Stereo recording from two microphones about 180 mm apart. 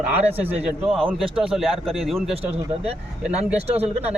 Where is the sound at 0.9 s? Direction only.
30° right (ahead or behind).